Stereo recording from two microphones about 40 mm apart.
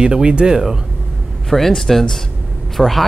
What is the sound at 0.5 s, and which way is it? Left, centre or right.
Speech, centre.